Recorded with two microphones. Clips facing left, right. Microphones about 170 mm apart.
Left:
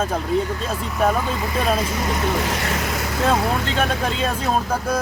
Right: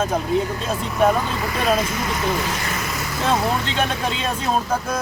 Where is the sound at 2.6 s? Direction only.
70° left (ahead or behind).